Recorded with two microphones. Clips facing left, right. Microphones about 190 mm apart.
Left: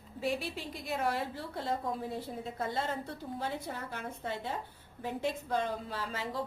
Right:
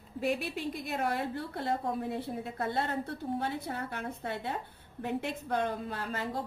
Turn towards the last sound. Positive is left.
turn(degrees=-55)  # may be behind; listen again after turning